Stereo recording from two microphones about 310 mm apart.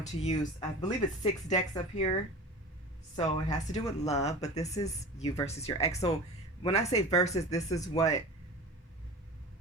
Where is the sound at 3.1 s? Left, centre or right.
Centre.